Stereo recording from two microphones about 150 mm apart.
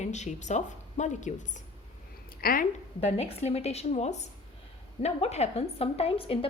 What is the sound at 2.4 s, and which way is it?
Speech, 75° left (ahead or behind).